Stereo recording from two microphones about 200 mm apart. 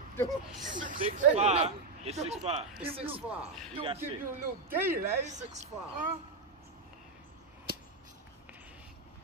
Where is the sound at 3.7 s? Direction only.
30° right (ahead or behind).